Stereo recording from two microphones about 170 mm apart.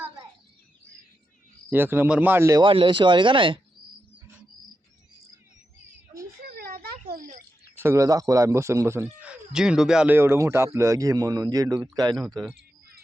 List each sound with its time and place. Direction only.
1.7 s speech: 10° right (ahead or behind)
2.6 s speech: 30° right (ahead or behind)
6.6 s a sound: 65° right (ahead or behind)
7.1 s bird: 60° right (ahead or behind)
7.8 s speech: 15° right (ahead or behind)